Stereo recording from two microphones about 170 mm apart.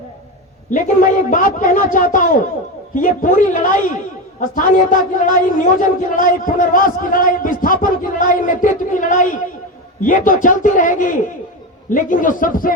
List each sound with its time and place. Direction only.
0.7 s a man's voice: 50° left (ahead or behind)